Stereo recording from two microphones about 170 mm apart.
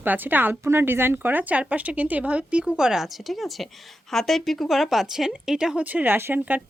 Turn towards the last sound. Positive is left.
turn(degrees=-10)  # may be behind; listen again after turning